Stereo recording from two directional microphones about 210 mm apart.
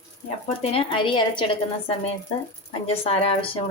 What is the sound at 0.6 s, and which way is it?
A woman's voice, 25° left (ahead or behind).